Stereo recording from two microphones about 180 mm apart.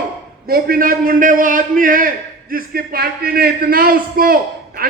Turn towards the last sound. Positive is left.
turn(degrees=-55)  # may be behind; listen again after turning